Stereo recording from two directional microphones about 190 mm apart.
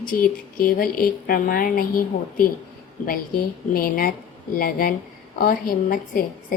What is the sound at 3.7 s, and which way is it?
A woman's voice, 50° left (ahead or behind).